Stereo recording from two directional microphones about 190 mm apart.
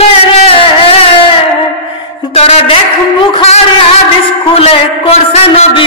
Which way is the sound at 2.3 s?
35° left (ahead or behind).